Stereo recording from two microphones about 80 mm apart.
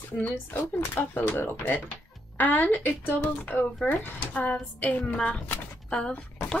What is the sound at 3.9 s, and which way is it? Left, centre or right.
Speech, left.